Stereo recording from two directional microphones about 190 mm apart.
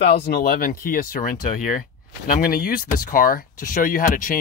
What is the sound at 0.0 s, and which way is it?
Speech, 60° left (ahead or behind).